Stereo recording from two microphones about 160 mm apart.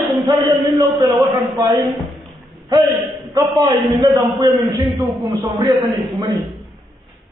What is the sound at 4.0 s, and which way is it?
A man's voice, 20° right (ahead or behind).